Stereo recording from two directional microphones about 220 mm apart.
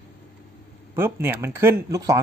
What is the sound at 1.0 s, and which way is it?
Speech, 10° right (ahead or behind).